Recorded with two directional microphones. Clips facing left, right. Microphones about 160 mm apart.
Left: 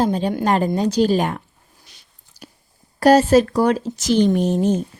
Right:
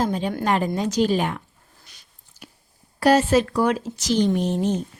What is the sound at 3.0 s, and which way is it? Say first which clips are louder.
Speech: left 4 dB; 40° left (ahead or behind).